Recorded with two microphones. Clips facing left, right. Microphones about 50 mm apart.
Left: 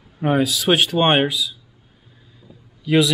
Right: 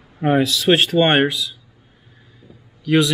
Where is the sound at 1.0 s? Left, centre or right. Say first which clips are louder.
Right 2 dB; centre.